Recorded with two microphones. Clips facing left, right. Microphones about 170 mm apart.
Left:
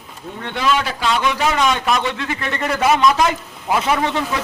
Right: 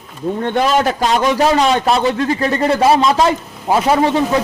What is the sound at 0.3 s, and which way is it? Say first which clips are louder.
A man's voice: right 5 dB; 45° right (ahead or behind).